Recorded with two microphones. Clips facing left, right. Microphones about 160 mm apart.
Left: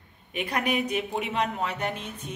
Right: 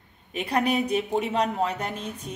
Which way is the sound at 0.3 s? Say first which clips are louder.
Right 3 dB; 30° right (ahead or behind).